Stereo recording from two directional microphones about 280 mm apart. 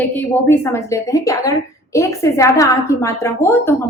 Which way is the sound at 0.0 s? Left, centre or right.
Centre.